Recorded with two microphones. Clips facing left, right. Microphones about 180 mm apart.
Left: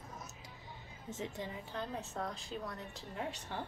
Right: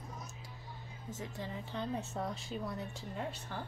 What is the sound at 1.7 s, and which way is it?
A woman's voice, centre (ahead or behind).